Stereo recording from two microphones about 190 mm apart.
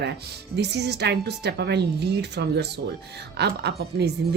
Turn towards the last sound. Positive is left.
turn(degrees=-60)  # may be behind; listen again after turning